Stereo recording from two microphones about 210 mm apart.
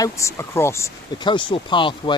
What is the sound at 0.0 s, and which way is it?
Speech, 15° left (ahead or behind).